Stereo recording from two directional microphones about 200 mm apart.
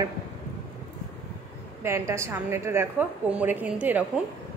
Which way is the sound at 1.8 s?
15° right (ahead or behind).